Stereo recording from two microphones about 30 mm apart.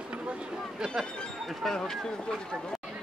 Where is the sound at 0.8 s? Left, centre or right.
Centre.